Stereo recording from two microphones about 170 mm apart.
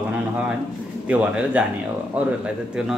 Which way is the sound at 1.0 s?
10° right (ahead or behind).